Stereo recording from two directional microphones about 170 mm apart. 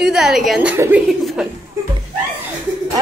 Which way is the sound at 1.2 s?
Centre (ahead or behind).